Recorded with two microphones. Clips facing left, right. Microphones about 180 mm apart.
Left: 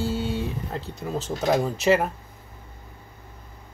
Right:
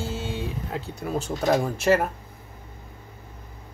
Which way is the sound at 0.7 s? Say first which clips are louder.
Right 1 dB; 10° right (ahead or behind).